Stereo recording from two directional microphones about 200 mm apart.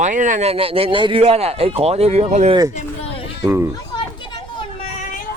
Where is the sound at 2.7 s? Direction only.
30° left (ahead or behind).